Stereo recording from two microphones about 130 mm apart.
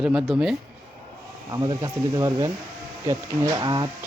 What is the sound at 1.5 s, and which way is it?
Speech, 30° right (ahead or behind).